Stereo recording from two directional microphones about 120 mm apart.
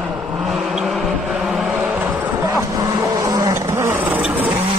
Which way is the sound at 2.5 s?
30° right (ahead or behind).